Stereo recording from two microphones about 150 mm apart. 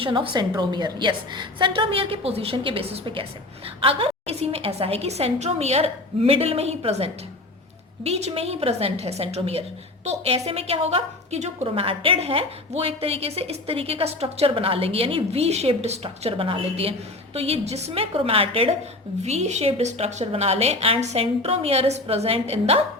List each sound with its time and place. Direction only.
0.0 s a woman's voice: 35° right (ahead or behind)